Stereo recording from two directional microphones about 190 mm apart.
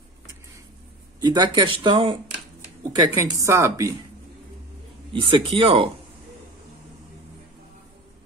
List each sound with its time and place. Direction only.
1.2 s speech: 20° right (ahead or behind)
3.2 s a woman's voice: 15° right (ahead or behind)
5.1 s speech: 30° right (ahead or behind)